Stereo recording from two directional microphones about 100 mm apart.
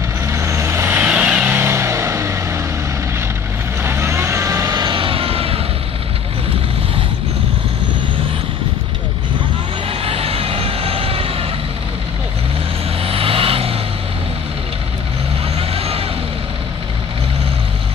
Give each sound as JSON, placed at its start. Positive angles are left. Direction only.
{"t": 0.3, "sound": "vehicle", "side_deg": -30}
{"t": 1.0, "sound": "vehicle", "side_deg": -10}
{"t": 1.5, "sound": "vehicle", "side_deg": -25}
{"t": 3.8, "sound": "vehicle", "side_deg": -25}
{"t": 4.9, "sound": "vehicle", "side_deg": -65}
{"t": 9.8, "sound": "vehicle", "side_deg": -75}
{"t": 13.0, "sound": "vehicle", "side_deg": -75}
{"t": 15.5, "sound": "vehicle", "side_deg": -80}